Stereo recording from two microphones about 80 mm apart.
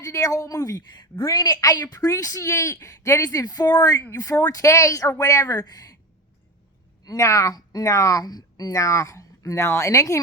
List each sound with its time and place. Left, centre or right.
0.0 s a woman's voice: left
4.4 s a woman's voice: left
7.0 s a woman's voice: left
8.2 s speech: left